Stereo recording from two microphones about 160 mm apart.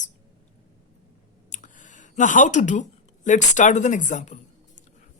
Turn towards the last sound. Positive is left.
turn(degrees=50)  # may be behind; listen again after turning